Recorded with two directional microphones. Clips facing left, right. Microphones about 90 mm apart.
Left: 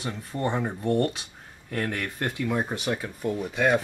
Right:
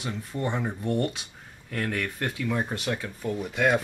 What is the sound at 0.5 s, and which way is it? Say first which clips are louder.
Speech: left 3 dB; 10° left (ahead or behind).